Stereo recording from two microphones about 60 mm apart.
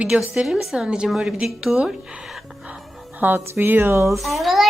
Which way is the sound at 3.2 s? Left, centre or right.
Right.